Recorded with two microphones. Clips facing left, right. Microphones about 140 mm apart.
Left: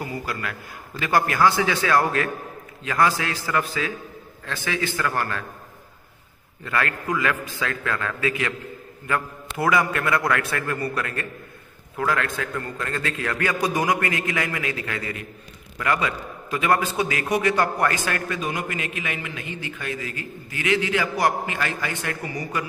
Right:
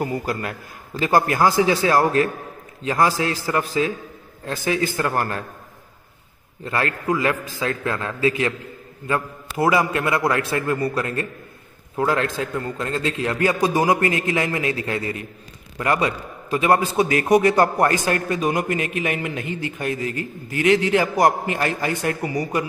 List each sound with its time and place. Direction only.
0.3 s a man's voice: 35° right (ahead or behind)
6.6 s a man's voice: 30° right (ahead or behind)
9.6 s a man's voice: 25° right (ahead or behind)